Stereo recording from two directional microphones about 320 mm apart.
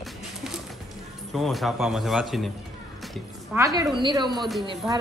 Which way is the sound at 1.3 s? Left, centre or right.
Centre.